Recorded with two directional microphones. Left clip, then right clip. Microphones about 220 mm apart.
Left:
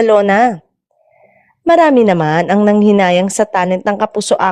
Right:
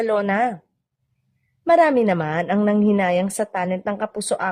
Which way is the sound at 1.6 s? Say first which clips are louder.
Left 7 dB; 35° left (ahead or behind).